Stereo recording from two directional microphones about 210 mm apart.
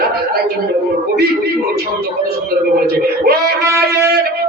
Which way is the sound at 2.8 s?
45° right (ahead or behind).